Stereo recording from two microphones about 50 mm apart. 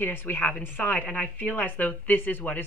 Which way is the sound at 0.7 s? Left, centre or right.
Left.